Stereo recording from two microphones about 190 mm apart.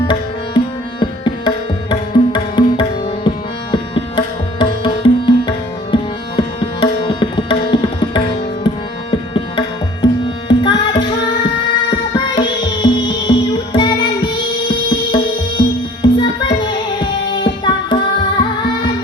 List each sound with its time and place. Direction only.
0.1 s tabla: 25° left (ahead or behind)
4.6 s music: 25° left (ahead or behind)
9.3 s tabla: 25° left (ahead or behind)
10.5 s music: 25° left (ahead or behind)